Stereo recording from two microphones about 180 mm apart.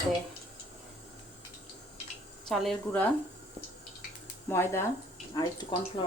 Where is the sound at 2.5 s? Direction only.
5° left (ahead or behind).